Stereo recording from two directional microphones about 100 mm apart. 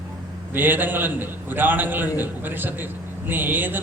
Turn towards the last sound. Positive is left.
turn(degrees=-20)  # may be behind; listen again after turning